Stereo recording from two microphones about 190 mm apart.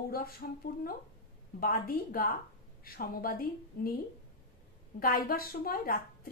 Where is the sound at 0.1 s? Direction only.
50° left (ahead or behind).